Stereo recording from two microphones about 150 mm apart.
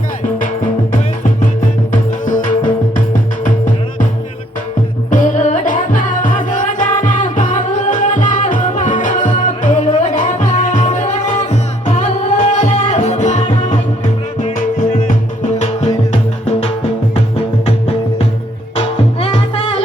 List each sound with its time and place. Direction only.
1.9 s music: 60° left (ahead or behind)
5.1 s music: 60° left (ahead or behind)
15.5 s music: 50° left (ahead or behind)